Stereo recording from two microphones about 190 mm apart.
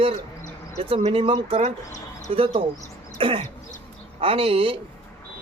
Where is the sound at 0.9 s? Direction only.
30° right (ahead or behind).